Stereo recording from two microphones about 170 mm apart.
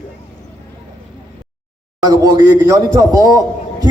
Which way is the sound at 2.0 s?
20° right (ahead or behind).